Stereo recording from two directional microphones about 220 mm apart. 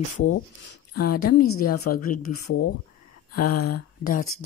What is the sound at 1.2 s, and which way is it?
Speech, 40° left (ahead or behind).